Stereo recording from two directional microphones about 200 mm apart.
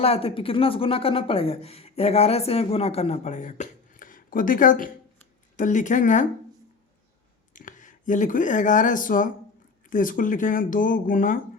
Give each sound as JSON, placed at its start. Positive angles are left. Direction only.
{"t": 0.0, "sound": "a woman's voice", "side_deg": 30}
{"t": 7.5, "sound": "speech", "side_deg": 40}